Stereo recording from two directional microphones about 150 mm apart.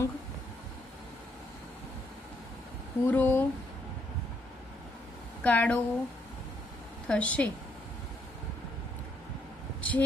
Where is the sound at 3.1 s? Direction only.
10° left (ahead or behind).